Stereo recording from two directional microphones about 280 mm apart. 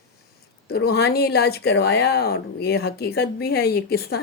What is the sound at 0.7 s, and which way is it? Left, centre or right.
Speech, left.